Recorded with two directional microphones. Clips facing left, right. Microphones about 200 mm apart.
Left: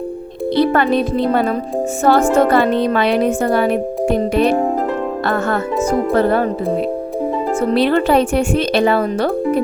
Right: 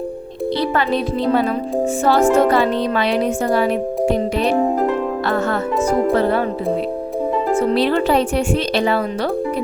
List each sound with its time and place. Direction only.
0.5 s speech: 55° left (ahead or behind)
6.1 s speech: 50° left (ahead or behind)
7.7 s speech: 55° left (ahead or behind)